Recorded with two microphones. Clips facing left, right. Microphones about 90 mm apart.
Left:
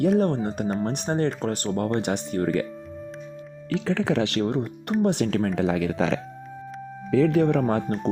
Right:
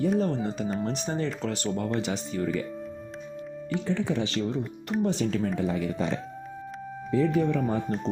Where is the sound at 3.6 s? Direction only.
90° left; by 5.5 s 60° left (ahead or behind).